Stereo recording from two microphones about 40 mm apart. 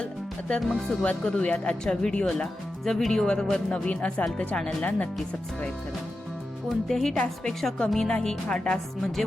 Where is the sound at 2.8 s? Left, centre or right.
Centre; by 5.7 s left.